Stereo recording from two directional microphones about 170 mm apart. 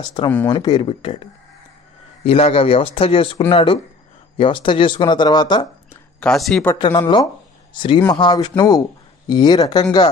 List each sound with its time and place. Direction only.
0.0 s speech: 30° left (ahead or behind)
6.1 s speech: 5° left (ahead or behind)
6.8 s speech: 25° left (ahead or behind)